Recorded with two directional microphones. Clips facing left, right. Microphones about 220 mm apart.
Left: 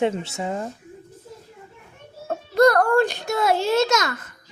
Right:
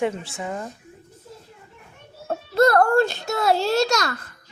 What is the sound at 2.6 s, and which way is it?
A child's voice, 15° left (ahead or behind).